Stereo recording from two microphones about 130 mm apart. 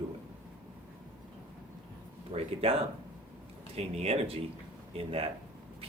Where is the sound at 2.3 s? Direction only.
50° right (ahead or behind).